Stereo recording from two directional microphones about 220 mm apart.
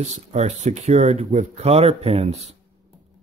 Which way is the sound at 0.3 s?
30° right (ahead or behind).